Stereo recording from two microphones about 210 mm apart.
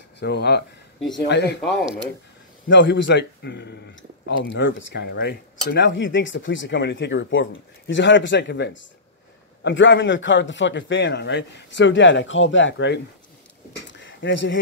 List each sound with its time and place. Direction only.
0.2 s speech: 50° left (ahead or behind)
2.7 s speech: 60° left (ahead or behind)
13.8 s a sound: 60° left (ahead or behind)